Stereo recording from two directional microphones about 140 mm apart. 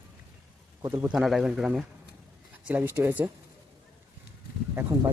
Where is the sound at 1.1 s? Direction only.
5° right (ahead or behind).